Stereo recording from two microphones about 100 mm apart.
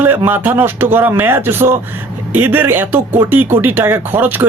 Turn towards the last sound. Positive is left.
turn(degrees=-20)  # may be behind; listen again after turning